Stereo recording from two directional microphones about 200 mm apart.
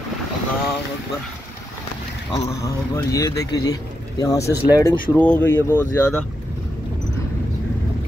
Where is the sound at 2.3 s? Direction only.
15° left (ahead or behind).